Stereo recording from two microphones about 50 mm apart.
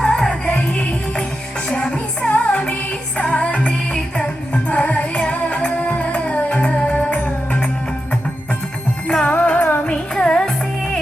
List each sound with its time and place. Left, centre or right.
0.0 s music: centre
1.7 s music: centre
9.0 s music: centre
9.4 s music: left